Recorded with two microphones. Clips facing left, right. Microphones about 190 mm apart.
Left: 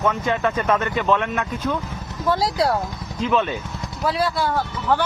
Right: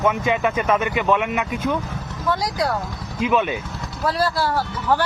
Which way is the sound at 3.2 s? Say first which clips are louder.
Right 1 dB; 15° right (ahead or behind).